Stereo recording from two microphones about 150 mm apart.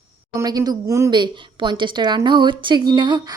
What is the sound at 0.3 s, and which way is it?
Speech, 25° right (ahead or behind).